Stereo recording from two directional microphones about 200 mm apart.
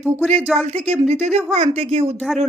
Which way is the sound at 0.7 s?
30° right (ahead or behind).